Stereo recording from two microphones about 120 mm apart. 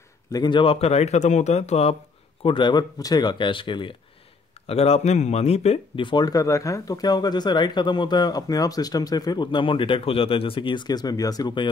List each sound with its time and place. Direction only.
0.3 s speech: 40° left (ahead or behind)
0.7 s speech: 60° left (ahead or behind)
2.4 s speech: 40° left (ahead or behind)
4.6 s speech: 60° left (ahead or behind)
5.9 s speech: 40° left (ahead or behind)